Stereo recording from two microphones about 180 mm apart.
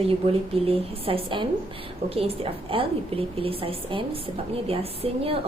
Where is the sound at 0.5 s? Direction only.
30° right (ahead or behind).